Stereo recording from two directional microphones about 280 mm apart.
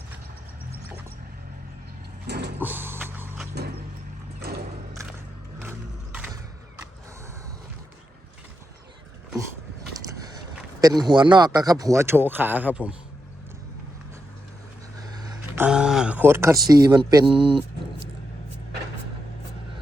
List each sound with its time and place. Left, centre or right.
2.2 s mechanisms: right
2.6 s vehicle: centre
3.5 s vehicle: right
4.4 s music: right
10.8 s speech: centre
15.1 s a sound: centre
17.1 s speech: centre